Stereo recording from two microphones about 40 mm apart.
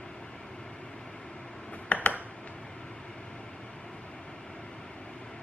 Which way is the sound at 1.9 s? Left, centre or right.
Left.